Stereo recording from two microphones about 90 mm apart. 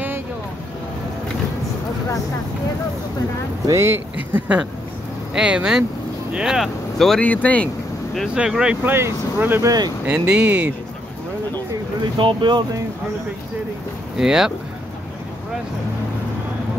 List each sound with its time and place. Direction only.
3.6 s speech: 30° right (ahead or behind)
5.3 s speech: 10° right (ahead or behind)
7.2 s speech: 15° left (ahead or behind)
8.4 s speech: 10° right (ahead or behind)
8.8 s speech: 25° right (ahead or behind)
9.6 s speech: 45° right (ahead or behind)
10.0 s speech: 15° right (ahead or behind)
12.2 s speech: 65° right (ahead or behind)
14.1 s speech: 5° right (ahead or behind)